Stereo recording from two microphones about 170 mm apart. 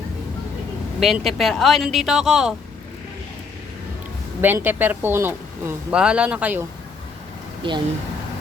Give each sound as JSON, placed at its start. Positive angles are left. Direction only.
{"t": 0.9, "sound": "speech", "side_deg": 0}
{"t": 4.4, "sound": "a woman's voice", "side_deg": -10}
{"t": 7.6, "sound": "speech", "side_deg": -30}